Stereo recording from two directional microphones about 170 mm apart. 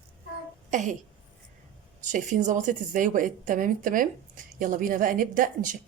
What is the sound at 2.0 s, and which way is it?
A woman's voice, 45° right (ahead or behind).